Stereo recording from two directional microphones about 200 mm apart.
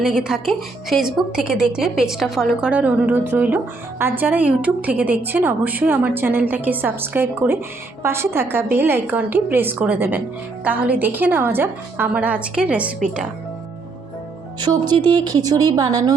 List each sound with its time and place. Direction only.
0.0 s speech: 5° right (ahead or behind)
14.6 s a woman's voice: 20° right (ahead or behind)